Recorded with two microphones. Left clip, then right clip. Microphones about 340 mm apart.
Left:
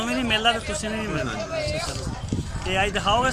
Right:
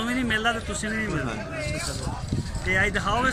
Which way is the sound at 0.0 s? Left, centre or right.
Centre.